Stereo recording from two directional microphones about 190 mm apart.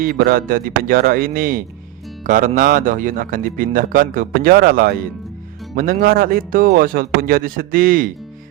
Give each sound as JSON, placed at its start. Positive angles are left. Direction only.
{"t": 0.0, "sound": "a man's voice", "side_deg": -50}